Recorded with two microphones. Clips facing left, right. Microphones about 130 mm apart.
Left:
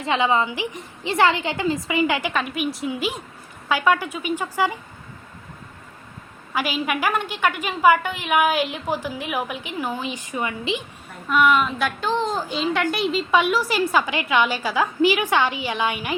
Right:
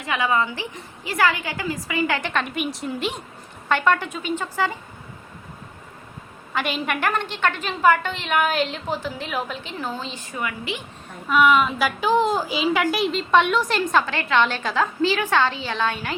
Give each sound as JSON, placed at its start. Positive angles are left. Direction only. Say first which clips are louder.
{"t": 0.0, "sound": "a woman's voice", "louder": "left 2 dB", "side_deg": 25}
{"t": 2.3, "sound": "a woman's voice", "louder": "left 1 dB", "side_deg": 0}
{"t": 6.5, "sound": "a woman's voice", "louder": "left 1 dB", "side_deg": 5}
{"t": 11.3, "sound": "a woman's voice", "louder": "right 1 dB", "side_deg": 0}